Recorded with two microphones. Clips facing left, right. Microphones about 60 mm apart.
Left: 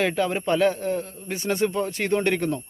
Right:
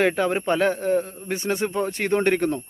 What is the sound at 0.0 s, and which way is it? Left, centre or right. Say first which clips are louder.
A man's voice: right 2 dB; right.